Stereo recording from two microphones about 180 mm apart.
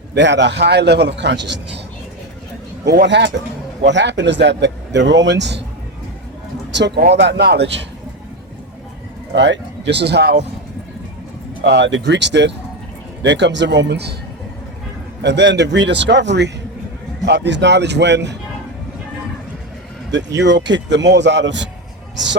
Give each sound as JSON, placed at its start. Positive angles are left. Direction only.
{"t": 0.1, "sound": "speech", "side_deg": -80}
{"t": 2.8, "sound": "speech", "side_deg": -70}
{"t": 6.7, "sound": "speech", "side_deg": -70}
{"t": 9.3, "sound": "speech", "side_deg": -75}
{"t": 11.6, "sound": "speech", "side_deg": -75}
{"t": 15.2, "sound": "speech", "side_deg": -75}
{"t": 20.1, "sound": "speech", "side_deg": -85}